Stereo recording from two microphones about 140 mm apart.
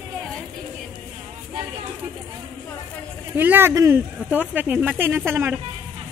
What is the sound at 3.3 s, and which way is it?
A woman's voice, 15° right (ahead or behind).